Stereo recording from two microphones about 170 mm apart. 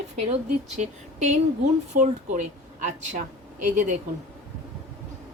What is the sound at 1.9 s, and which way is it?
Speech, 55° right (ahead or behind).